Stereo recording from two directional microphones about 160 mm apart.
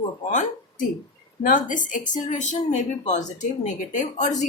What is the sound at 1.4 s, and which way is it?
A woman's voice, 55° left (ahead or behind).